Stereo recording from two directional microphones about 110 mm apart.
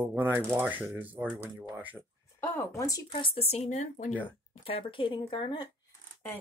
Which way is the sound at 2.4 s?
25° left (ahead or behind).